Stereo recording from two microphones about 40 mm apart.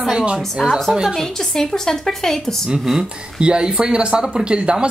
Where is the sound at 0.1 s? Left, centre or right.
Right.